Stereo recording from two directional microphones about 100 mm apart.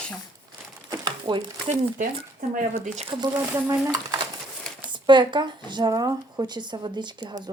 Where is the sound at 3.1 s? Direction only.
55° right (ahead or behind).